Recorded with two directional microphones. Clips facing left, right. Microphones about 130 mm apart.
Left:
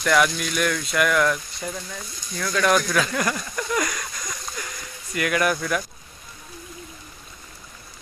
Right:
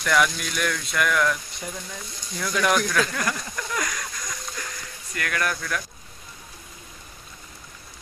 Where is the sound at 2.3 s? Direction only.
15° right (ahead or behind).